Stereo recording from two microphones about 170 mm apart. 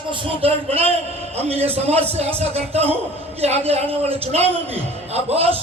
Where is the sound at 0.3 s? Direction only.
35° right (ahead or behind).